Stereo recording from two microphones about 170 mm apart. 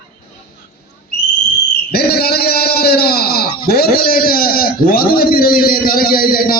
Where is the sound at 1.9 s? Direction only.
65° left (ahead or behind).